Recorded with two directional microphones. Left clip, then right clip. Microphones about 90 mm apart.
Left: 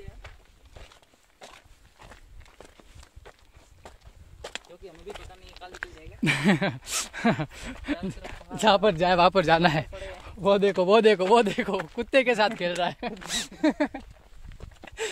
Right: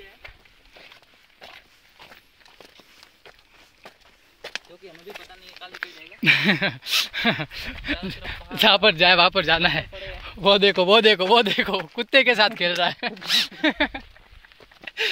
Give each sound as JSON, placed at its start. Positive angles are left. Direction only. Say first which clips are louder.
{"t": 2.6, "sound": "walk", "louder": "right 2 dB", "side_deg": -20}
{"t": 5.0, "sound": "a sound", "louder": "right 2 dB", "side_deg": -10}
{"t": 6.2, "sound": "speech", "louder": "right 6 dB", "side_deg": 40}
{"t": 6.8, "sound": "speech", "louder": "right 10 dB", "side_deg": 80}
{"t": 7.9, "sound": "speech", "louder": "right 4 dB", "side_deg": 45}
{"t": 8.5, "sound": "speech", "louder": "right 5 dB", "side_deg": 0}
{"t": 9.3, "sound": "speech", "louder": "right 1 dB", "side_deg": 75}
{"t": 10.4, "sound": "speech", "louder": "right 5 dB", "side_deg": -25}
{"t": 10.7, "sound": "speech", "louder": "right 4 dB", "side_deg": -10}
{"t": 11.0, "sound": "speech", "louder": "right 3 dB", "side_deg": 5}
{"t": 13.3, "sound": "speech", "louder": "right 6 dB", "side_deg": 60}